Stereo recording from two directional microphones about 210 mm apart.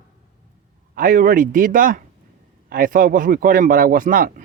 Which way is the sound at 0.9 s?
40° right (ahead or behind).